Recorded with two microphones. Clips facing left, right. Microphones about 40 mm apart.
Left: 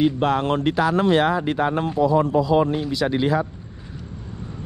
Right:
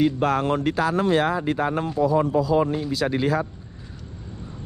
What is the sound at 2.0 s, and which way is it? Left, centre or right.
Speech, left.